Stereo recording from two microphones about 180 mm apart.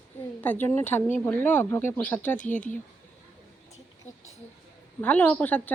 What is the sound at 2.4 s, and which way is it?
Speech, 45° left (ahead or behind).